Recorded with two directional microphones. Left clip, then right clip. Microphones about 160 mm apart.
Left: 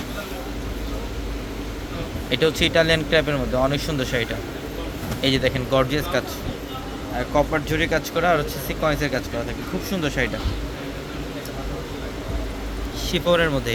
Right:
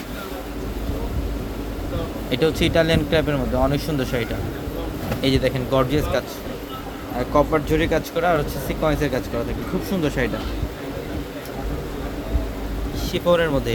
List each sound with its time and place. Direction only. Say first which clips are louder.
2.3 s speech: left 1 dB; 5° right (ahead or behind)
13.1 s speech: right 1 dB; centre (ahead or behind)